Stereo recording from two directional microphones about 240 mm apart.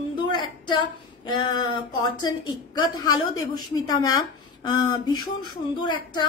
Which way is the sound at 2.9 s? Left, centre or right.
Centre.